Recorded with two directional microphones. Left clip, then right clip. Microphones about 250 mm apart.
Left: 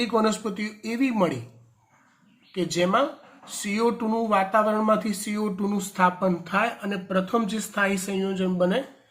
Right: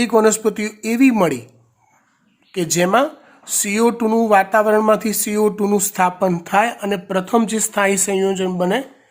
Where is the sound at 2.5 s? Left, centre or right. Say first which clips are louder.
Right 7 dB; right.